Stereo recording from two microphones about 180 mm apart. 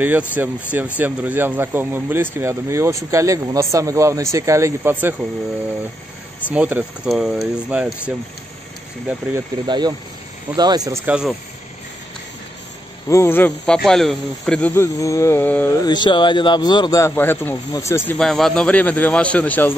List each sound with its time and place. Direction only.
0.0 s speech: 10° right (ahead or behind)
6.5 s speech: 5° right (ahead or behind)
9.7 s speech: 25° right (ahead or behind)
11.1 s speech: 5° right (ahead or behind)
13.1 s speech: 15° left (ahead or behind)
15.8 s speech: 25° left (ahead or behind); by 19.7 s 10° left (ahead or behind)